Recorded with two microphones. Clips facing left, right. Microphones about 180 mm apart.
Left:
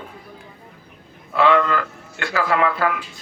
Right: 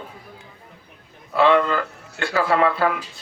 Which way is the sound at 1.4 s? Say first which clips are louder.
Even; 30° right (ahead or behind).